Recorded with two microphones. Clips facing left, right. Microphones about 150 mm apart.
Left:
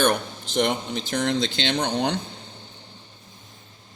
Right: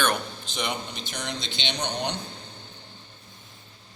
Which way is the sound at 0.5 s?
90° left.